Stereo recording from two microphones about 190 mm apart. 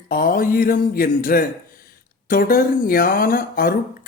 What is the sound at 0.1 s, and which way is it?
A man's voice, 50° left (ahead or behind).